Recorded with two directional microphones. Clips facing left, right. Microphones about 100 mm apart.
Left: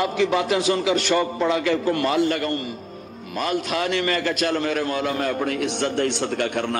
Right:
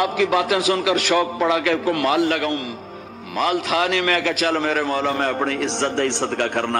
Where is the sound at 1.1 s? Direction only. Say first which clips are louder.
Right 2 dB; 90° right.